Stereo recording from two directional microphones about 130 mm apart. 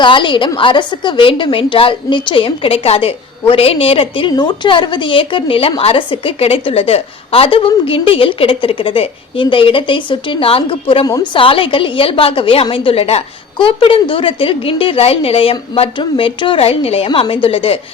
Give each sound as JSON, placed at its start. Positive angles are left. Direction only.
{"t": 0.0, "sound": "a woman's voice", "side_deg": 40}
{"t": 11.0, "sound": "a woman's voice", "side_deg": 30}
{"t": 11.3, "sound": "a woman's voice", "side_deg": 40}